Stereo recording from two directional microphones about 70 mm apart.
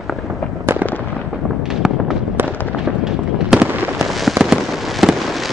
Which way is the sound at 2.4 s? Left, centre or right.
Right.